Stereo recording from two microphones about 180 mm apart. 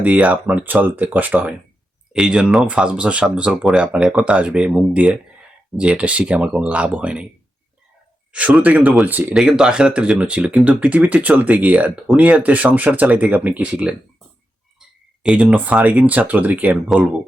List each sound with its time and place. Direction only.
0.0 s speech: 5° right (ahead or behind)
8.3 s speech: 5° right (ahead or behind)